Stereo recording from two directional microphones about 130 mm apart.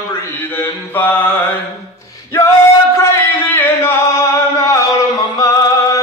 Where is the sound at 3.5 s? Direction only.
20° left (ahead or behind).